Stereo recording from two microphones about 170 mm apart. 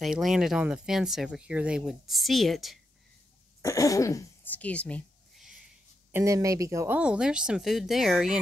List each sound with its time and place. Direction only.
0.0 s speech: centre (ahead or behind)
3.6 s speech: 20° left (ahead or behind)
4.6 s a sound: 10° left (ahead or behind)
6.1 s speech: 20° right (ahead or behind)
7.0 s speech: 5° right (ahead or behind)